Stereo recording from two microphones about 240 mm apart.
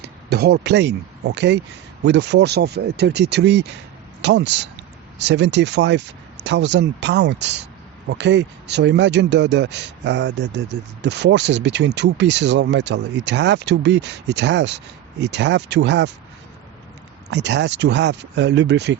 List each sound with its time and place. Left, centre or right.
0.0 s speech: right
17.3 s speech: right